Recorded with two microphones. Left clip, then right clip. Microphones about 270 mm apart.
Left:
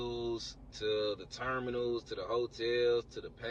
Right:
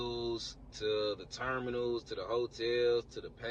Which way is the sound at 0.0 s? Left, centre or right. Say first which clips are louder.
Even; right.